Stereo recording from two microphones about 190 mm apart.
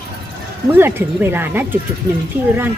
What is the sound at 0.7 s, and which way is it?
A woman's voice, 10° right (ahead or behind).